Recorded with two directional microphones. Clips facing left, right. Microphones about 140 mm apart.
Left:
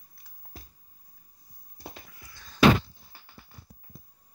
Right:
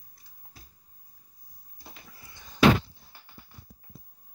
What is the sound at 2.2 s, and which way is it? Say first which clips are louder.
Door: right 1 dB; 20° right (ahead or behind).